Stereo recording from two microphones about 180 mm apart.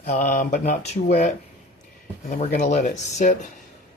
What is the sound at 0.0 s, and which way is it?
Speech, 40° left (ahead or behind).